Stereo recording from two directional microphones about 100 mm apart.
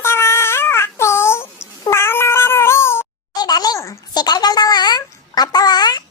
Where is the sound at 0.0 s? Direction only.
25° left (ahead or behind).